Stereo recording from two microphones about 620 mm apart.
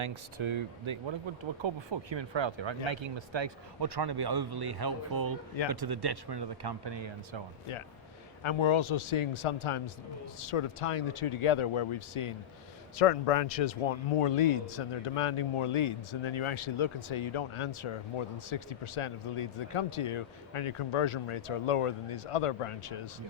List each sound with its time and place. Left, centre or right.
0.3 s speech: right
8.4 s speech: left
13.0 s speech: left